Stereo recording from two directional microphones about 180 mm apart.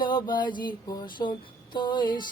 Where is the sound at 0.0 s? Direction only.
25° left (ahead or behind).